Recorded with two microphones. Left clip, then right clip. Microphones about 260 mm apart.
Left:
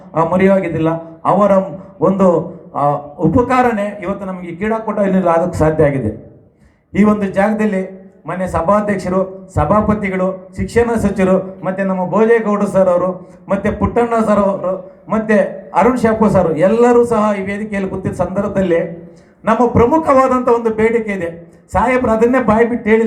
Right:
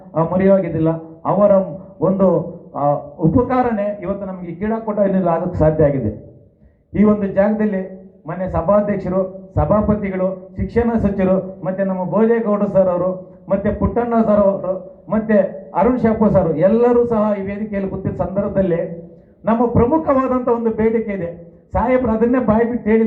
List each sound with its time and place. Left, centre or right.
0.1 s a man's voice: left
6.9 s a man's voice: left